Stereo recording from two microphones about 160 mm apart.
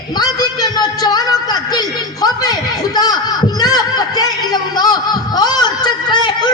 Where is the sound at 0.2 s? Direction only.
25° left (ahead or behind).